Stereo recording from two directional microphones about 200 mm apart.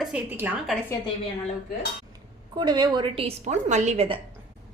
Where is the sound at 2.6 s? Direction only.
20° right (ahead or behind).